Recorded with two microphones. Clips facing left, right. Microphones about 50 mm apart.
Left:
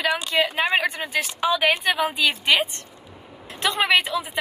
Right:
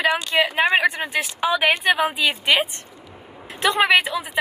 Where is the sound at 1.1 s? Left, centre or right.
Centre.